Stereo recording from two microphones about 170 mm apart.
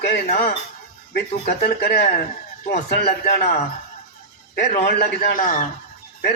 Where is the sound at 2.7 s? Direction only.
40° left (ahead or behind).